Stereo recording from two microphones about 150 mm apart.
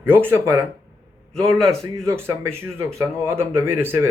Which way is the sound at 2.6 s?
15° right (ahead or behind).